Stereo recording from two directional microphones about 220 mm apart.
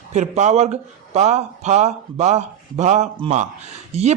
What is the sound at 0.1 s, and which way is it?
A man's voice, 30° right (ahead or behind).